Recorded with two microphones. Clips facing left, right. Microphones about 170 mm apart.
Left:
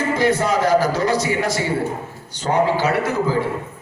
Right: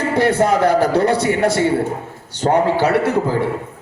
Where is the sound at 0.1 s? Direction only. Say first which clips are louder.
Right 4 dB; 60° right (ahead or behind).